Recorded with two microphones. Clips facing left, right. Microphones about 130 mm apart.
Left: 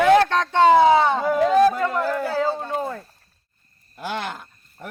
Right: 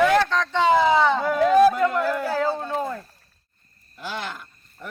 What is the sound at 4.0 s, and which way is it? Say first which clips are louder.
Speech: left 3 dB; 50° left (ahead or behind).